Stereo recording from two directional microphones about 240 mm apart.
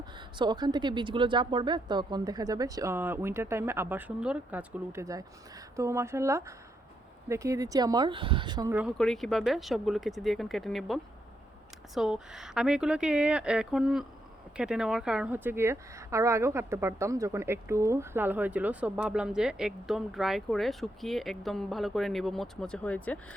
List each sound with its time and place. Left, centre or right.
0.2 s speech: centre
8.7 s a woman's voice: centre